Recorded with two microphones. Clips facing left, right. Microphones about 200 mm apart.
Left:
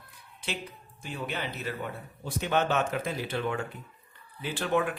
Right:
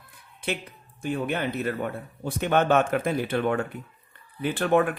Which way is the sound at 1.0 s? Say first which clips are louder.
Right 8 dB; 55° right (ahead or behind).